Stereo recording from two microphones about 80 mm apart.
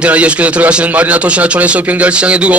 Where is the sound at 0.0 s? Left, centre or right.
Centre.